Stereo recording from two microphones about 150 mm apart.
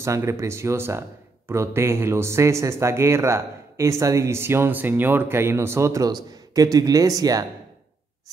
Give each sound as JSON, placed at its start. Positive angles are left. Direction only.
{"t": 0.0, "sound": "speech", "side_deg": -20}